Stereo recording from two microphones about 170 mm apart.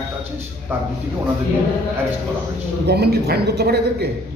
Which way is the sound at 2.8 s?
70° right (ahead or behind).